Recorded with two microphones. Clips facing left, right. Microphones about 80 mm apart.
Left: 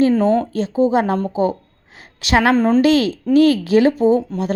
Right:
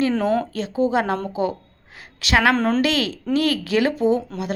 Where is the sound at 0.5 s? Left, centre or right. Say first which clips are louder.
Left 4 dB; left.